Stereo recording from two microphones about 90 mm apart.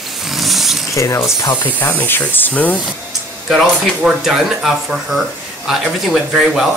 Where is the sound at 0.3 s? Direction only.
Centre (ahead or behind).